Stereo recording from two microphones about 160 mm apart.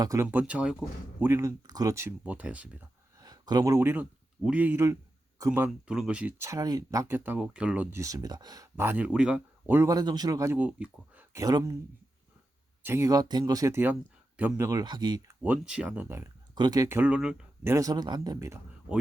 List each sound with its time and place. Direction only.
0.0 s speech: 20° right (ahead or behind)
3.2 s speech: 25° right (ahead or behind)
8.7 s speech: 15° right (ahead or behind)
12.8 s speech: 15° right (ahead or behind)
14.7 s speech: 25° right (ahead or behind)
15.4 s speech: 5° right (ahead or behind)
16.6 s speech: 25° right (ahead or behind); by 17.7 s 5° right (ahead or behind)
17.7 s speech: 20° right (ahead or behind)